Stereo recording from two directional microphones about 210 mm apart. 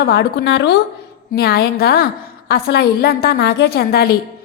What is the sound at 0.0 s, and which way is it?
A woman's voice, 50° left (ahead or behind).